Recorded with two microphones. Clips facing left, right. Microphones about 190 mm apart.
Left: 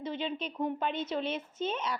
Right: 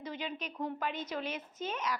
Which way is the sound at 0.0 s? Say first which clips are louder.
Left 5 dB; 25° left (ahead or behind).